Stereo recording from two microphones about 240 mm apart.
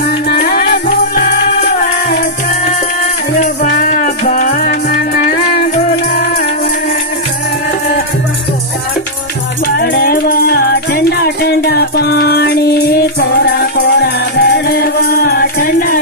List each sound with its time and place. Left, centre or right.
0.3 s music: left
3.3 s music: left
9.8 s music: left